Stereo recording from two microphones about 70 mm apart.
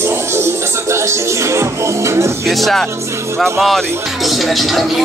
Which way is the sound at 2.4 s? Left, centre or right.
Centre.